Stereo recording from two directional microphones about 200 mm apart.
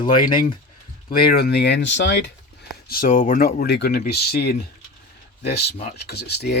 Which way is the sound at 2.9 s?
45° left (ahead or behind).